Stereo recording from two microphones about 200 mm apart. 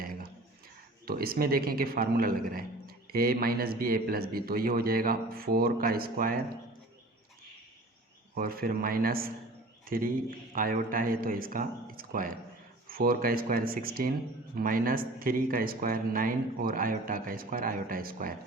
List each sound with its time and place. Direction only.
0.0 s a sound: 45° right (ahead or behind)
1.0 s a man's voice: 50° right (ahead or behind)
8.4 s a man's voice: 45° right (ahead or behind)